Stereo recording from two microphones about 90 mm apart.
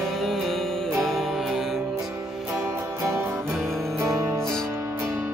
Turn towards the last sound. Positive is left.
turn(degrees=-35)  # may be behind; listen again after turning